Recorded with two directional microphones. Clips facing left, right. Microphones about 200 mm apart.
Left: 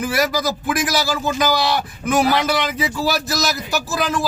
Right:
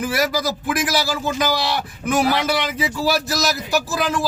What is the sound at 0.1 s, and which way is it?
A man's voice, 5° right (ahead or behind).